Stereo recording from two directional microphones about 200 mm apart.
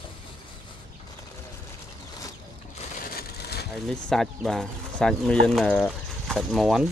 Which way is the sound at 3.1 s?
50° left (ahead or behind).